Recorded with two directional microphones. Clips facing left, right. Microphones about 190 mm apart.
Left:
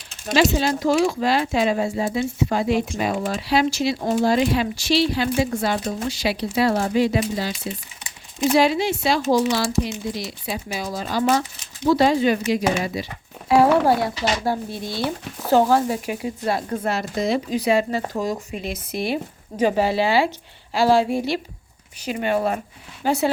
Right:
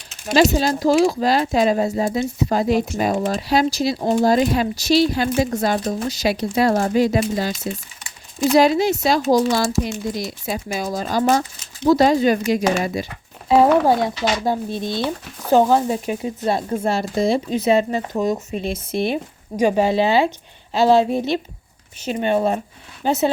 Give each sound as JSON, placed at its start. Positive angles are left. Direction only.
{"t": 0.5, "sound": "speech", "side_deg": -40}
{"t": 8.5, "sound": "speech", "side_deg": -40}
{"t": 13.5, "sound": "speech", "side_deg": -20}